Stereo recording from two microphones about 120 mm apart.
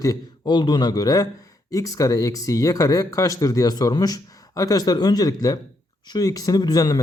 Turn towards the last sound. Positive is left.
turn(degrees=30)  # may be behind; listen again after turning